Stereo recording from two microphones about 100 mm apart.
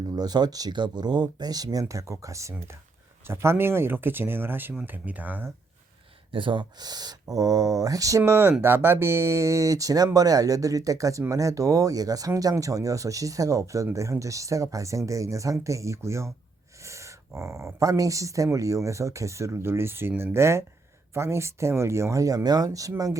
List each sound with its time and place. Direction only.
0.1 s speech: 40° right (ahead or behind); by 5.5 s 15° right (ahead or behind)
6.3 s speech: 55° right (ahead or behind); by 22.9 s 35° right (ahead or behind)